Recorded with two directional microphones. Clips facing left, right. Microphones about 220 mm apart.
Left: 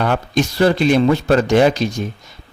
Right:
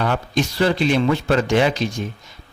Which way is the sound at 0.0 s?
45° left (ahead or behind).